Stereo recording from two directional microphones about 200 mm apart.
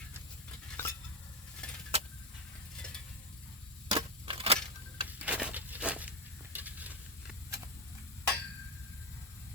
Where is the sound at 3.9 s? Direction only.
25° right (ahead or behind).